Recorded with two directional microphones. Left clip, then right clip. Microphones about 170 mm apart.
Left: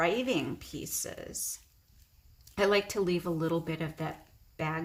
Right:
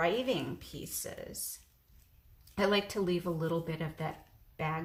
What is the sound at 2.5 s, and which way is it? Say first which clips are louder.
A woman's voice: left 3 dB; 35° left (ahead or behind).